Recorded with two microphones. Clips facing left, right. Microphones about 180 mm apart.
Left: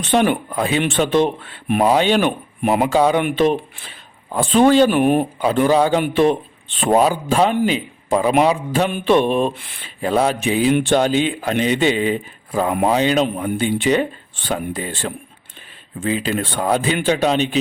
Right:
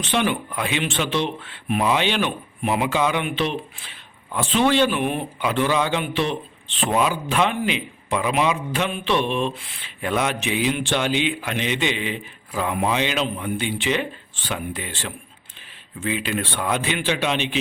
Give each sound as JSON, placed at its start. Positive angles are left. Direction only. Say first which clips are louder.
{"t": 0.0, "sound": "speech", "louder": "left 6 dB", "side_deg": 50}
{"t": 5.4, "sound": "a man's voice", "louder": "left 3 dB", "side_deg": 40}